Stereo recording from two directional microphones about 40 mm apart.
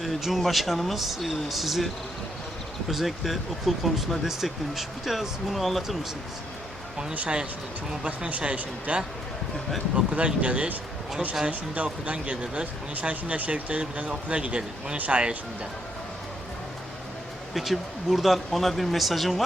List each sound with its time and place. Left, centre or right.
0.0 s speech: centre
2.9 s speech: centre
7.1 s speech: right
14.9 s speech: right
17.5 s speech: centre